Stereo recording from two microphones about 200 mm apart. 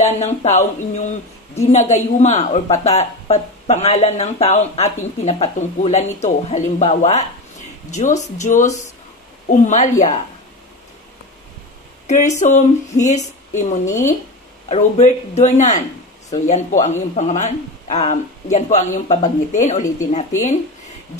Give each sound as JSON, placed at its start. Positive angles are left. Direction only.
{"t": 0.0, "sound": "a woman's voice", "side_deg": 35}
{"t": 12.1, "sound": "a woman's voice", "side_deg": 35}